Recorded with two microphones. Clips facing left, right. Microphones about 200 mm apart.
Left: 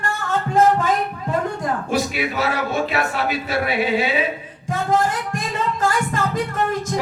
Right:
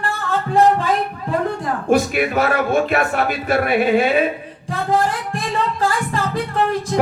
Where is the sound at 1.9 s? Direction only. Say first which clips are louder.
Right 10 dB; 50° right (ahead or behind).